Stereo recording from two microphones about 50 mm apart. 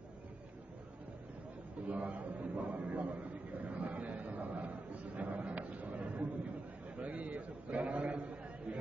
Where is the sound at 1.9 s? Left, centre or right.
Right.